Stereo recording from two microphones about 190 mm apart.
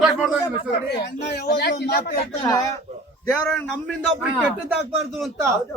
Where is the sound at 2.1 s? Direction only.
25° left (ahead or behind).